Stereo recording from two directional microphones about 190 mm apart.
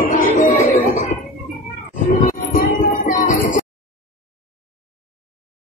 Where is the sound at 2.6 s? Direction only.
45° left (ahead or behind).